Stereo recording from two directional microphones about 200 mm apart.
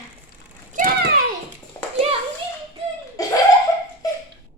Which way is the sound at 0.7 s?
40° right (ahead or behind).